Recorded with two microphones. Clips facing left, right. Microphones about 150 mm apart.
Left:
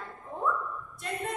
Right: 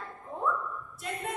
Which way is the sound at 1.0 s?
5° right (ahead or behind).